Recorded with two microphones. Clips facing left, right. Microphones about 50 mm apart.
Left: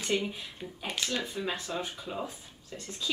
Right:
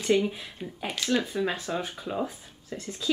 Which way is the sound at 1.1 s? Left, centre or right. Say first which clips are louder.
Right 10 dB; right.